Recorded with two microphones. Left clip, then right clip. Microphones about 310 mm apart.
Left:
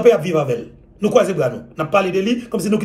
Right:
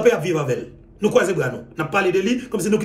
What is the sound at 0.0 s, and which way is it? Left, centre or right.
A man's voice, centre.